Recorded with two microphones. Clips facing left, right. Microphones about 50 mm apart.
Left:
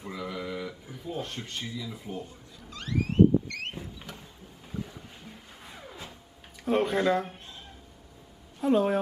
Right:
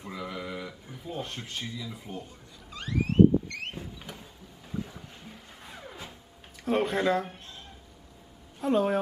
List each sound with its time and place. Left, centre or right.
0.0 s speech: centre
2.7 s vehicle: centre
4.1 s a sound: centre
5.0 s music: centre
6.6 s speech: centre
8.5 s a woman's voice: centre